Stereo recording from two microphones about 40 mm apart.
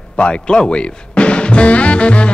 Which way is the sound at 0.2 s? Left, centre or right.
Left.